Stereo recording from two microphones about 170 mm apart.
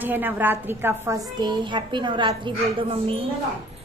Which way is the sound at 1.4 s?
25° right (ahead or behind).